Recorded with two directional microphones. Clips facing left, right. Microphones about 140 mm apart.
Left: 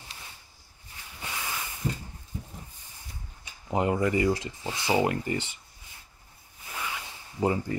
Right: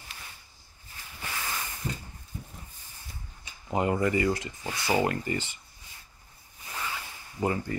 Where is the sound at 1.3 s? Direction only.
10° left (ahead or behind).